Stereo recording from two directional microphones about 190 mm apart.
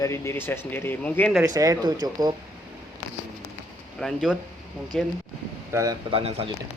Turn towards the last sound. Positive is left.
turn(degrees=-30)  # may be behind; listen again after turning